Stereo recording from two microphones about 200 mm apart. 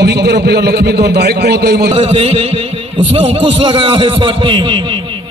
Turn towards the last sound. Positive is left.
turn(degrees=-25)  # may be behind; listen again after turning